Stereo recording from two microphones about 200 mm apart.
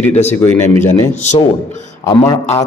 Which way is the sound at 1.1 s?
35° left (ahead or behind).